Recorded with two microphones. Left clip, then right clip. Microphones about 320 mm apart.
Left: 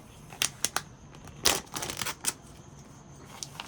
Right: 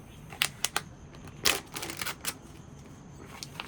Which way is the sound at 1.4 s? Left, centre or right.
Centre.